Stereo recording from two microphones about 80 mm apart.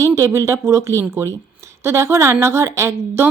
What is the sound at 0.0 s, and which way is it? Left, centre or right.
Speech, right.